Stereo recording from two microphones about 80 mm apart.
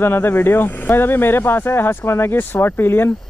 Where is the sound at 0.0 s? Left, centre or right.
Left.